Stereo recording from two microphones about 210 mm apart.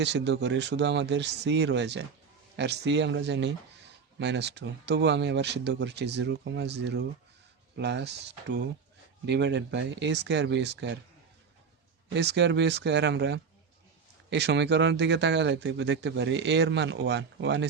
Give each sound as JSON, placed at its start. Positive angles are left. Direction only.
{"t": 0.0, "sound": "speech", "side_deg": -55}
{"t": 12.0, "sound": "speech", "side_deg": -50}